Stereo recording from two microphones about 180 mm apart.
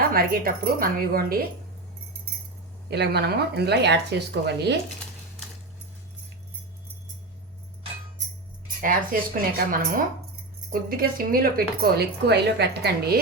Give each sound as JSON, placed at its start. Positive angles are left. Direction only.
{"t": 0.1, "sound": "a woman's voice", "side_deg": -55}
{"t": 2.9, "sound": "speech", "side_deg": -65}
{"t": 8.6, "sound": "a woman's voice", "side_deg": -50}